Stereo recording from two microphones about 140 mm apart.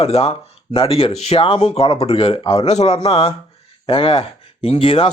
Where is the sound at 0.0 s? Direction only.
45° left (ahead or behind).